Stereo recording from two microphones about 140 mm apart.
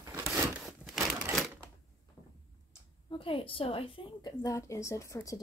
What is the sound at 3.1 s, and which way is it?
A woman's voice, 40° left (ahead or behind).